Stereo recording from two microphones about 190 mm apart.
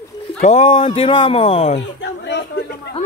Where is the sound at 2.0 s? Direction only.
65° left (ahead or behind).